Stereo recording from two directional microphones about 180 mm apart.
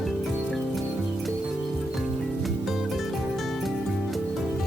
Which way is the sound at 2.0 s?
Centre (ahead or behind).